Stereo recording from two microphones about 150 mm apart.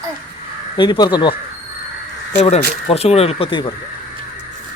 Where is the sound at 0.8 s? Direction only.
30° left (ahead or behind).